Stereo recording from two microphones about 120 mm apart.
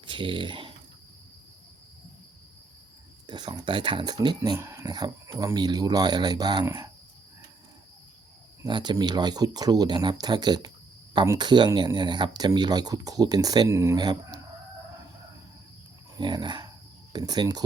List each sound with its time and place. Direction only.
0.0 s speech: 40° right (ahead or behind)
3.2 s speech: 35° right (ahead or behind)
4.5 s speech: 25° right (ahead or behind)
8.6 s speech: 40° right (ahead or behind)
13.7 s speech: 20° right (ahead or behind)
13.9 s speech: 35° right (ahead or behind)
16.1 s dog: 40° right (ahead or behind)
17.1 s speech: 35° right (ahead or behind)